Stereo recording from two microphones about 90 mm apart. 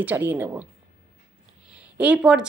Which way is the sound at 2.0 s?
10° right (ahead or behind).